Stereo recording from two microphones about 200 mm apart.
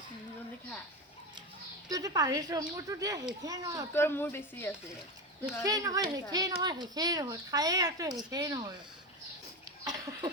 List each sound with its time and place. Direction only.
1.9 s speech: 20° right (ahead or behind)
3.9 s a woman's voice: 10° left (ahead or behind)
5.4 s speech: 15° right (ahead or behind)
9.8 s a sound: 20° right (ahead or behind)